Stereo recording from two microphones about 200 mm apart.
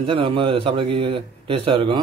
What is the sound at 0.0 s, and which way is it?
A man's voice, 25° right (ahead or behind).